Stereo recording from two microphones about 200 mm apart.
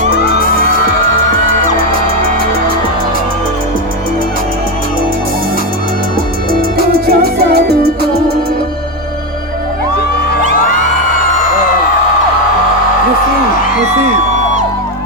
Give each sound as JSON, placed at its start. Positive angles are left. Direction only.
{"t": 6.5, "sound": "music", "side_deg": -50}
{"t": 10.5, "sound": "music", "side_deg": 45}